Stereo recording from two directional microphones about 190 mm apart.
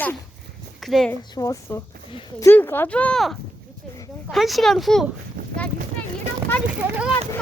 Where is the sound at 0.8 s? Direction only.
Centre (ahead or behind).